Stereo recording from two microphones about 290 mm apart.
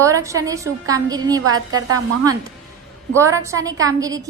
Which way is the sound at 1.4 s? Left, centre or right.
Right.